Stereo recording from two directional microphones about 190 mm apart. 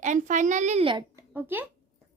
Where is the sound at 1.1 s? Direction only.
10° right (ahead or behind).